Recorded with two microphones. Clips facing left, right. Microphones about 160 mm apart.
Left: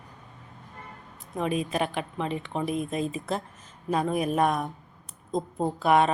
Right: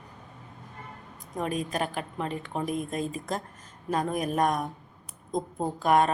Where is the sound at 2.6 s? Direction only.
40° right (ahead or behind).